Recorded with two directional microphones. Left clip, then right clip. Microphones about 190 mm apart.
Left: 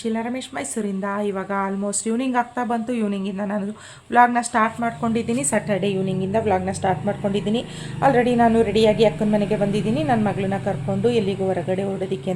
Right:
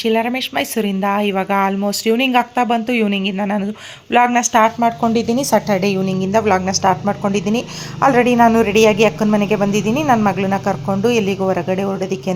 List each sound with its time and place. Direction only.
0.0 s a woman's voice: 25° right (ahead or behind)